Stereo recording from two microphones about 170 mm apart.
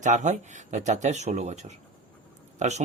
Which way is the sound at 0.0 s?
45° right (ahead or behind).